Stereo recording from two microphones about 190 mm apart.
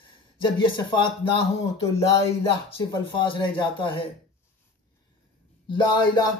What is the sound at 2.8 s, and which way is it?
Speech, 20° left (ahead or behind).